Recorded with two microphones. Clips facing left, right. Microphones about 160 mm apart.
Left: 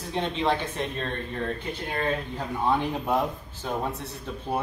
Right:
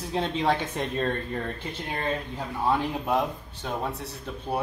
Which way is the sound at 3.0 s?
Centre (ahead or behind).